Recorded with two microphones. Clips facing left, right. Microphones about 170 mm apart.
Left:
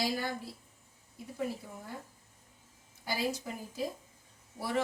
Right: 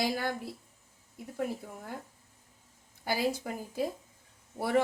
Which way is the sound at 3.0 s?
55° right (ahead or behind).